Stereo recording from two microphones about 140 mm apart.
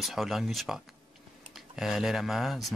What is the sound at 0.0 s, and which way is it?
Speech, centre (ahead or behind).